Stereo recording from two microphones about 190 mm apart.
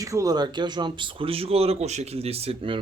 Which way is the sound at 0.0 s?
15° right (ahead or behind).